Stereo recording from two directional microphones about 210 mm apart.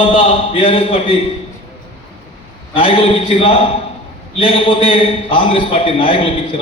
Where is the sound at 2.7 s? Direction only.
25° left (ahead or behind).